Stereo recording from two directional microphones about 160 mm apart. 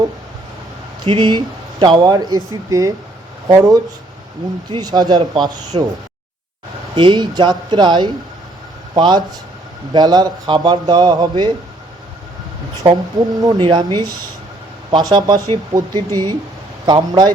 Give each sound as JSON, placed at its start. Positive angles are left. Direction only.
{"t": 1.0, "sound": "speech", "side_deg": -30}
{"t": 6.9, "sound": "speech", "side_deg": -30}
{"t": 12.8, "sound": "speech", "side_deg": -30}